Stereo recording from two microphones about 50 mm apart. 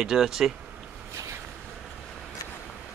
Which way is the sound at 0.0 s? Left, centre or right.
Centre.